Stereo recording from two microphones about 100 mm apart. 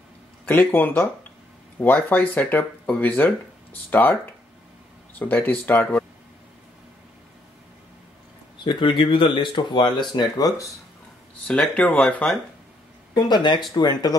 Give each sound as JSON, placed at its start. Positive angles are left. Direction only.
{"t": 0.5, "sound": "speech", "side_deg": 20}
{"t": 5.2, "sound": "speech", "side_deg": 20}
{"t": 8.6, "sound": "speech", "side_deg": 55}
{"t": 11.4, "sound": "speech", "side_deg": 10}
{"t": 13.1, "sound": "speech", "side_deg": 45}